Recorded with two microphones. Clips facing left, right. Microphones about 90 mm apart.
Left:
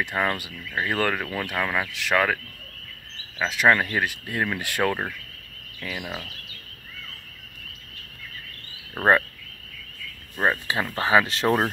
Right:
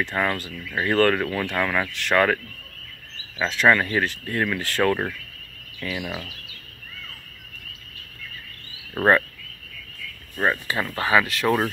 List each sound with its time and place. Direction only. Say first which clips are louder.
0.0 s speech: right 1 dB; 15° left (ahead or behind)
8.9 s speech: right 1 dB; 15° left (ahead or behind)
10.3 s speech: even; 20° left (ahead or behind)